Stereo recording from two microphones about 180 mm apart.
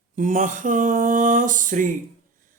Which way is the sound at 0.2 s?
45° right (ahead or behind).